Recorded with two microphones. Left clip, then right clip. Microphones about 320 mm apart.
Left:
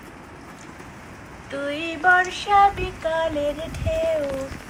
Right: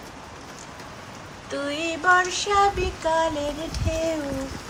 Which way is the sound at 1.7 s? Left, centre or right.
Centre.